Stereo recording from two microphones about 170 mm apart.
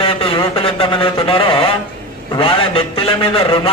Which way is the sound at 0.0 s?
35° left (ahead or behind).